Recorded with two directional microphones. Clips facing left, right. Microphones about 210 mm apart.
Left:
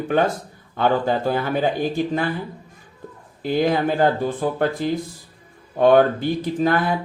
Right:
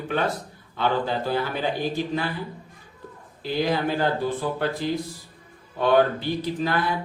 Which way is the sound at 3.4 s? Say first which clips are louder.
Left 5 dB; 50° left (ahead or behind).